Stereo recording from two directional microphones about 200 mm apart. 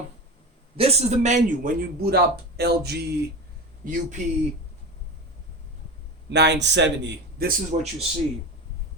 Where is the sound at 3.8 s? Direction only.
45° right (ahead or behind).